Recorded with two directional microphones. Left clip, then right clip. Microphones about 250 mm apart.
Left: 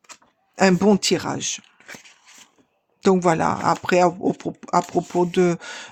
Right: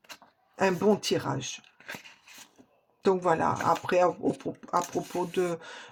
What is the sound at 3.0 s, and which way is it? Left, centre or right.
Speech, left.